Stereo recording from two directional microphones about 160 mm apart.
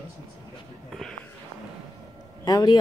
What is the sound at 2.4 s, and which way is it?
Speech, 25° left (ahead or behind).